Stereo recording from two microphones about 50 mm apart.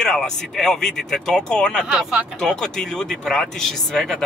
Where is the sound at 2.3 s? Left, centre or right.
Centre.